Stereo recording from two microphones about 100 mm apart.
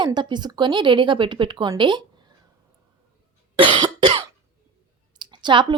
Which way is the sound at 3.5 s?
55° right (ahead or behind).